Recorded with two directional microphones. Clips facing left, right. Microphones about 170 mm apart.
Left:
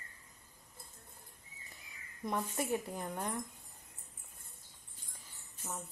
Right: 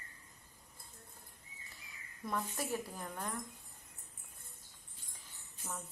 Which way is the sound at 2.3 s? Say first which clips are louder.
Left 3 dB; 25° left (ahead or behind).